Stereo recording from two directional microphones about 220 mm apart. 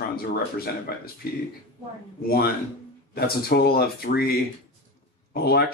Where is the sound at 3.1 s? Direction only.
45° left (ahead or behind).